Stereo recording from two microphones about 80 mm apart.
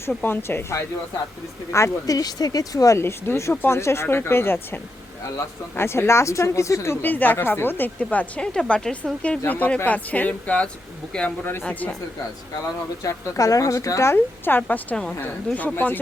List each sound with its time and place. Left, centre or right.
0.2 s speech: left
3.0 s speech: left; by 11.9 s centre
13.0 s speech: left
14.4 s speech: left